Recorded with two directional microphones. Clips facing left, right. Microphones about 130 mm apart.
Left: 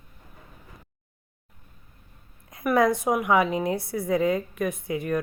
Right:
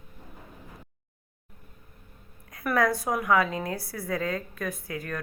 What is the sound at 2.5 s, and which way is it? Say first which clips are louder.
A woman's voice: left 4 dB; 25° left (ahead or behind).